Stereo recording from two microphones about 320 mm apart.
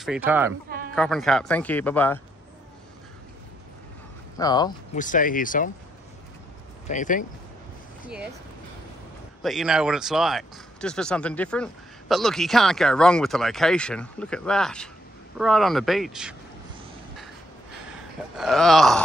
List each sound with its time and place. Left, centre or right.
0.0 s speech: centre
4.4 s speech: centre
4.9 s speech: left
6.9 s speech: left
9.4 s speech: centre
18.4 s speech: centre